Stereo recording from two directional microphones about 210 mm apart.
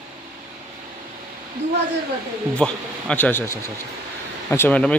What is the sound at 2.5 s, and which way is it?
Speech, 5° left (ahead or behind).